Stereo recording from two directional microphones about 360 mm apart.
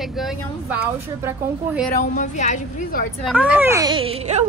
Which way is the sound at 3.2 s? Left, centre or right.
Centre.